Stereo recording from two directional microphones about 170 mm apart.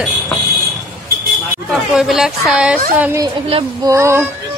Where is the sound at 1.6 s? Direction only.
Centre (ahead or behind).